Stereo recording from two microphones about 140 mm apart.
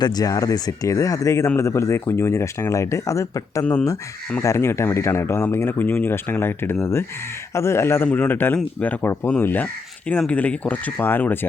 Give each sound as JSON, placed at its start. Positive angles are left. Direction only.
{"t": 0.0, "sound": "speech", "side_deg": 30}